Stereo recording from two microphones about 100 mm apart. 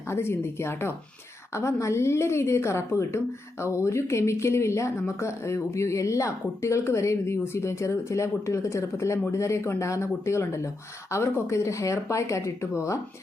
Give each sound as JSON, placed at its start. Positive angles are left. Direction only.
{"t": 0.1, "sound": "speech", "side_deg": 25}